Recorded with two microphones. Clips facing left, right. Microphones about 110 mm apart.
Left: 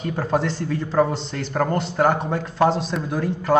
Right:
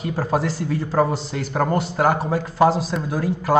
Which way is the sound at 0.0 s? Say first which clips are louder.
Even; 5° right (ahead or behind).